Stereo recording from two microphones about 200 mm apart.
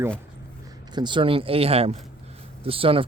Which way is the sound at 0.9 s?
20° right (ahead or behind).